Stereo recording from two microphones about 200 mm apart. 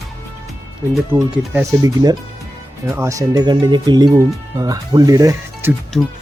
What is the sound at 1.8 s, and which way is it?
Speech, 20° right (ahead or behind).